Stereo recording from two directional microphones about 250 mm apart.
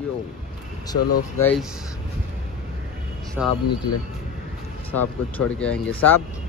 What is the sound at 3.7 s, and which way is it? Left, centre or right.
Speech, left.